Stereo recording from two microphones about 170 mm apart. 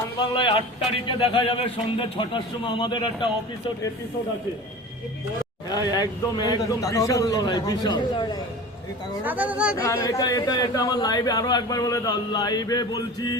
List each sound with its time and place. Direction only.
0.2 s speech: 30° left (ahead or behind)
5.6 s speech: 25° left (ahead or behind)
9.2 s speech: 10° right (ahead or behind)
9.7 s speech: 15° left (ahead or behind)